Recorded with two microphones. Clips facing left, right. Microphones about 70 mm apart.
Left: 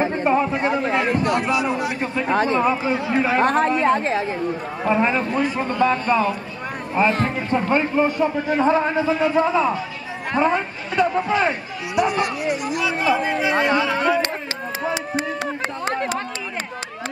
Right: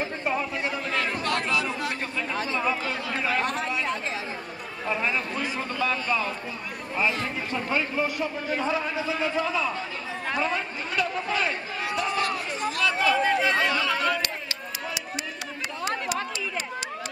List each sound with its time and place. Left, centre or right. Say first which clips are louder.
0.0 s a sound: left 9 dB; left
1.2 s a man's voice: left 6 dB; centre
2.2 s a man's voice: left 12 dB; left
2.6 s speech: left 8 dB; left
3.3 s a man's voice: left 10 dB; left
4.8 s a man's voice: left 8 dB; left
11.9 s a man's voice: left 7 dB; centre
13.6 s speech: left 6 dB; left
13.8 s a sound: left 6 dB; centre
15.8 s a sound: left 4 dB; left